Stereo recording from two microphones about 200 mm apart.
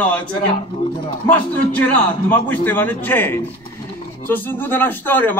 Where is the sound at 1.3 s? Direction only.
5° left (ahead or behind).